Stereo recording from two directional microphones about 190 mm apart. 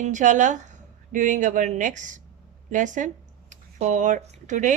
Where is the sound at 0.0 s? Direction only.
40° right (ahead or behind).